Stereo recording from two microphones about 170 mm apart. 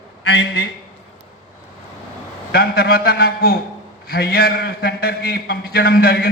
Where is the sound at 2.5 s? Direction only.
65° left (ahead or behind).